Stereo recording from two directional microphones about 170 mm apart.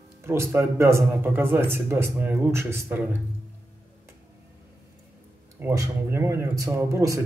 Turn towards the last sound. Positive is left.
turn(degrees=-20)  # may be behind; listen again after turning